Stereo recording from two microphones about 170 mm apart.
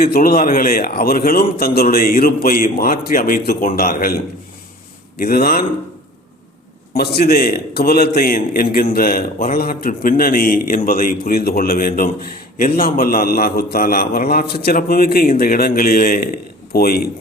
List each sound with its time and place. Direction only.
0.0 s a man's voice: 55° left (ahead or behind)
5.2 s a man's voice: 60° left (ahead or behind)
6.9 s a man's voice: 70° left (ahead or behind)